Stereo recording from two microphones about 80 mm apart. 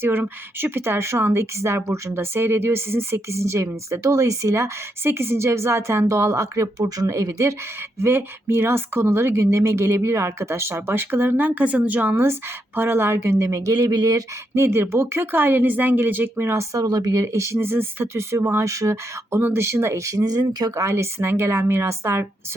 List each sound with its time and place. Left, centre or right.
0.0 s a woman's voice: right
13.7 s speech: right
16.7 s a woman's voice: right
19.4 s speech: right
20.7 s a woman's voice: right